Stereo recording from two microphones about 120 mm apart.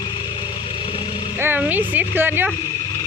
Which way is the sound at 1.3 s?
15° right (ahead or behind).